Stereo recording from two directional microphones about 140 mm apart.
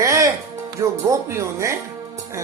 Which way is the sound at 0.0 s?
20° right (ahead or behind).